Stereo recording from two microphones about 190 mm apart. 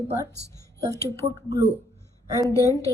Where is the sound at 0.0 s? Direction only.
15° left (ahead or behind).